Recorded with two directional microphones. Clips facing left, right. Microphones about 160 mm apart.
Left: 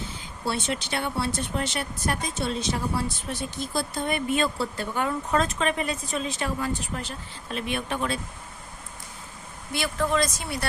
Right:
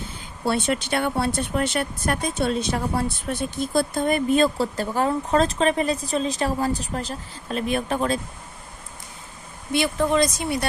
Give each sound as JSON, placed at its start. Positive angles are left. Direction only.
{"t": 0.4, "sound": "speech", "side_deg": -55}
{"t": 9.7, "sound": "speech", "side_deg": -20}